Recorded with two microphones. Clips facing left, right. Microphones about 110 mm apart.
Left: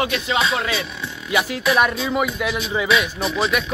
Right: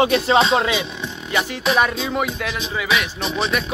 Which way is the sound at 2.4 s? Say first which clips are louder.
Left 3 dB; 15° left (ahead or behind).